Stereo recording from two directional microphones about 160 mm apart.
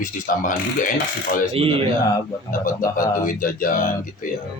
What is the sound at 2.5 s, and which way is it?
Speech, 60° left (ahead or behind).